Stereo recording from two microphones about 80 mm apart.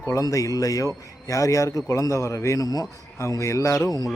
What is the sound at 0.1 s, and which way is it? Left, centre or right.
Speech, left.